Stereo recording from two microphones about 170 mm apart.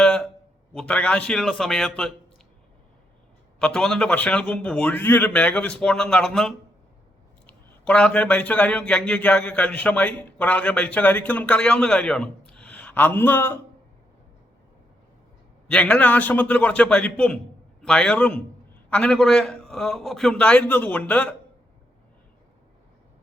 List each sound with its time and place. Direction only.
0.0 s a sound: 5° left (ahead or behind)
0.7 s a man's voice: 5° left (ahead or behind)
3.6 s a man's voice: 5° left (ahead or behind)
15.6 s a man's voice: 5° left (ahead or behind)